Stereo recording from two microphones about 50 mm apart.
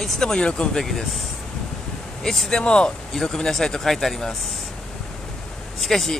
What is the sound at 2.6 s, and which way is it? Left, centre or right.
Speech, centre.